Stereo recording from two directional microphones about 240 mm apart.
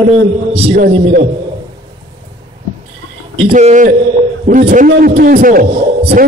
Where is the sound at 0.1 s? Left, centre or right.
Right.